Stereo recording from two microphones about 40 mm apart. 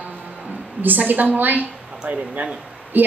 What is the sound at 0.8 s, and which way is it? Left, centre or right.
A woman's voice, right.